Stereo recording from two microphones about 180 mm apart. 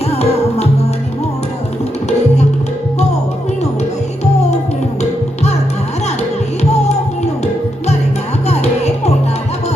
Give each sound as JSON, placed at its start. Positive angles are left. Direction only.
{"t": 0.1, "sound": "music", "side_deg": 35}
{"t": 8.4, "sound": "music", "side_deg": 35}